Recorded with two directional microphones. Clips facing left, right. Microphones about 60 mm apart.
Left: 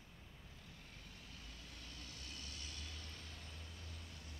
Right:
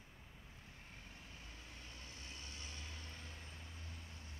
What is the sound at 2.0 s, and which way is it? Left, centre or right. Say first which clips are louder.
Vehicle: even; right.